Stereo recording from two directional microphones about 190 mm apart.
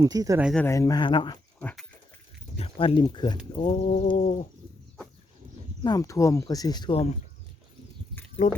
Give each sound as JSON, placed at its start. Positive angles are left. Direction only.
{"t": 0.0, "sound": "speech", "side_deg": -20}
{"t": 0.6, "sound": "speech", "side_deg": 15}
{"t": 1.6, "sound": "goat", "side_deg": 0}
{"t": 2.6, "sound": "speech", "side_deg": 30}
{"t": 5.8, "sound": "speech", "side_deg": 20}
{"t": 8.4, "sound": "speech", "side_deg": 40}